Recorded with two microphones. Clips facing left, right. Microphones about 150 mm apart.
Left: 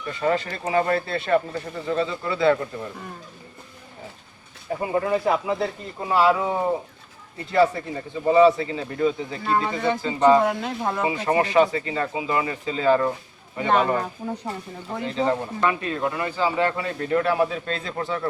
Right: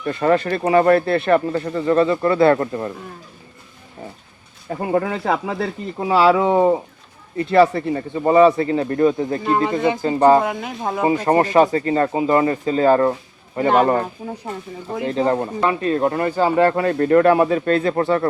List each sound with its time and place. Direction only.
0.1 s speech: 60° right (ahead or behind)
4.9 s speech: 70° right (ahead or behind); by 6.7 s 90° right
7.3 s speech: 70° right (ahead or behind)
9.6 s speech: 15° right (ahead or behind)
10.0 s speech: 50° right (ahead or behind)
10.4 s speech: centre (ahead or behind)
11.0 s speech: 45° right (ahead or behind)
15.0 s speech: 45° right (ahead or behind)